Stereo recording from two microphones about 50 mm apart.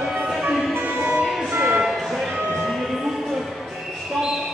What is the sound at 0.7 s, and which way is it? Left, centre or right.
Music, right.